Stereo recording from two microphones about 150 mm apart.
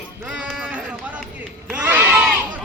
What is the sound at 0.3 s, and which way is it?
Run, 5° right (ahead or behind).